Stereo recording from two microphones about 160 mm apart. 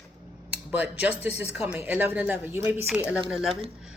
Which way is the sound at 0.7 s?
10° right (ahead or behind).